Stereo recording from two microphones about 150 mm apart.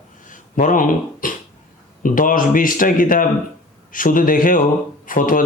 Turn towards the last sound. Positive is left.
turn(degrees=65)  # may be behind; listen again after turning